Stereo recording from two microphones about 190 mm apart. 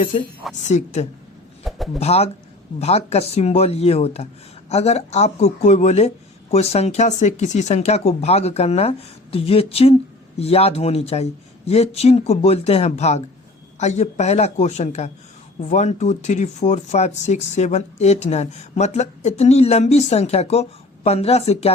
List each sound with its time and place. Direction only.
0.6 s speech: 40° left (ahead or behind)
1.7 s a sound: centre (ahead or behind)
2.0 s speech: 35° left (ahead or behind)